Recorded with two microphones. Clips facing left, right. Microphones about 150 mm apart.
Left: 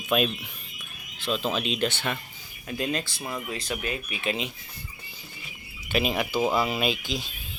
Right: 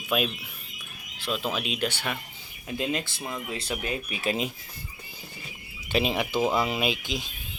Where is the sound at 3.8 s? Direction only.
35° right (ahead or behind).